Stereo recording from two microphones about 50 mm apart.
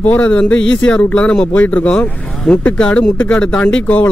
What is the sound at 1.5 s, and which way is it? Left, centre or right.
Speech, left.